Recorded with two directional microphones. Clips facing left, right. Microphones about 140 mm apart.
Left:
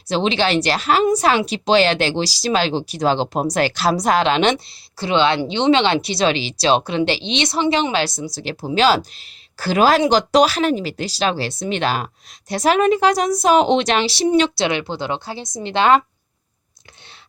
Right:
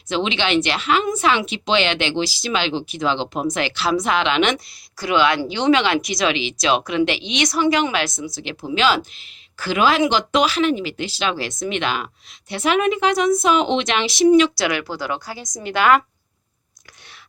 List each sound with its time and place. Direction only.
0.1 s a woman's voice: 35° left (ahead or behind)